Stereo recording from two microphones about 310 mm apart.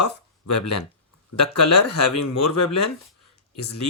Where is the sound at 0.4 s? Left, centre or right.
Left.